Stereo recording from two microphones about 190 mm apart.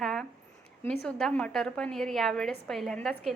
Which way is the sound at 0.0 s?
Centre (ahead or behind).